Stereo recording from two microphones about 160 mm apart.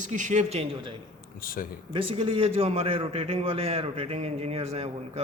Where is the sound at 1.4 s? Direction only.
60° left (ahead or behind).